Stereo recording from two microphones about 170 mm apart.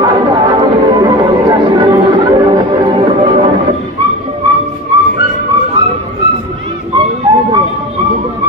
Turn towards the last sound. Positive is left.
turn(degrees=-20)  # may be behind; listen again after turning